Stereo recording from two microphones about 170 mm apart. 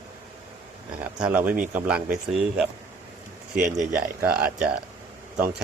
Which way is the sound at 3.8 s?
10° right (ahead or behind).